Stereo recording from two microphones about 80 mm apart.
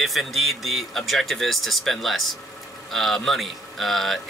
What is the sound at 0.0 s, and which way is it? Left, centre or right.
Speech, centre.